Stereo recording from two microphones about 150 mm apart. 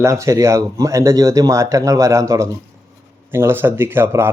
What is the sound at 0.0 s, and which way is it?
Speech, 20° right (ahead or behind).